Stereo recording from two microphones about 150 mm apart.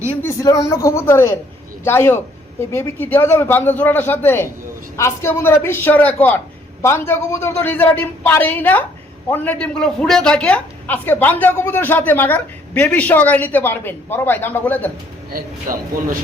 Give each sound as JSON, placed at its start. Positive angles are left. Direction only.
{"t": 0.2, "sound": "a woman's voice", "side_deg": 15}
{"t": 15.3, "sound": "a man's voice", "side_deg": -70}